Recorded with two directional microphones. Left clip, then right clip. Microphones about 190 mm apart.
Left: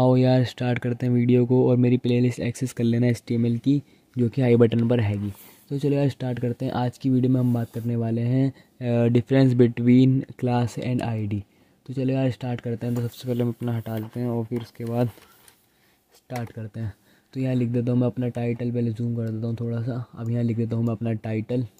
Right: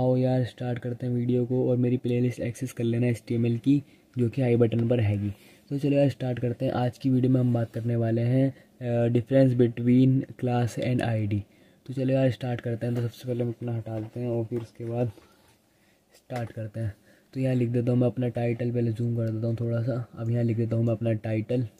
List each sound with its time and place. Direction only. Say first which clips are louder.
0.0 s speech: left 5 dB; 35° left (ahead or behind); by 4.4 s 20° left (ahead or behind)
4.4 s speech: left 5 dB; 35° left (ahead or behind)
13.4 s speech: left 4 dB; 45° left (ahead or behind)
16.3 s speech: left 1 dB; 25° left (ahead or behind)